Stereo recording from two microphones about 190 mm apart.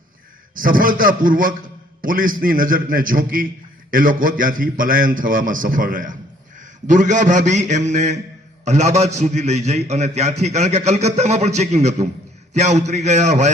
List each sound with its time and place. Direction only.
0.5 s a man's voice: 45° right (ahead or behind)